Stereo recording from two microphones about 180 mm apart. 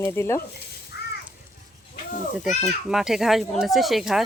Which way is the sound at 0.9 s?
65° left (ahead or behind).